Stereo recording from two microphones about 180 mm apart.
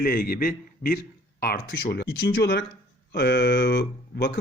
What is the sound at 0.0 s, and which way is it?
Speech, 55° left (ahead or behind).